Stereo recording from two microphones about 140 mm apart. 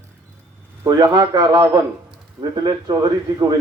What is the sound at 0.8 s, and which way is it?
Speech, 30° right (ahead or behind).